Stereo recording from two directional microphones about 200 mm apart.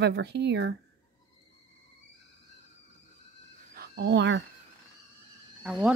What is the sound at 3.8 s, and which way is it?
Speech, 55° right (ahead or behind).